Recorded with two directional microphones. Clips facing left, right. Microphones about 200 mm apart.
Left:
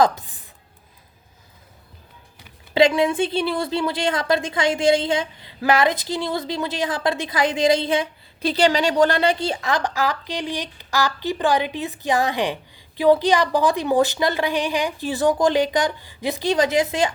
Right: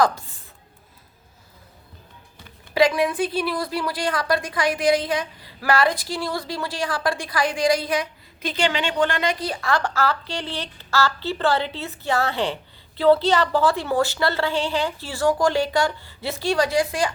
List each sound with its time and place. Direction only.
0.0 s a woman's voice: 20° left (ahead or behind)
2.7 s a woman's voice: 25° left (ahead or behind)